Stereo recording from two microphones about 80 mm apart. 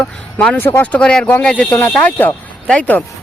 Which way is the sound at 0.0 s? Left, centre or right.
Centre.